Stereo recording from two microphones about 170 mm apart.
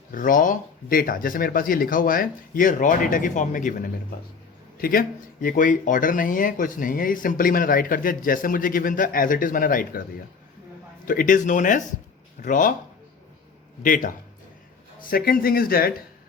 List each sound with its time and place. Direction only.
0.1 s speech: 55° left (ahead or behind)
11.0 s speech: 55° left (ahead or behind)
13.8 s speech: 50° left (ahead or behind)
15.1 s speech: 60° left (ahead or behind)